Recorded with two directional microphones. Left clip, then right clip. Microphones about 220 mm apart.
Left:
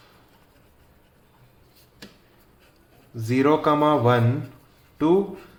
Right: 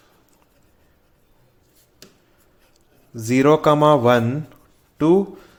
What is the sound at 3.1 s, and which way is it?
A man's voice, 45° right (ahead or behind).